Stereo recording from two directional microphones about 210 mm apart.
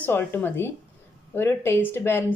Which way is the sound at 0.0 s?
10° left (ahead or behind).